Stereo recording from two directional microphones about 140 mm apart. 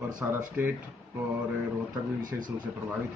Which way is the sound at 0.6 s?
10° right (ahead or behind).